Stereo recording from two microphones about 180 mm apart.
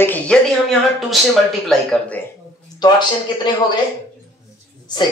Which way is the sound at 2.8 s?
25° left (ahead or behind).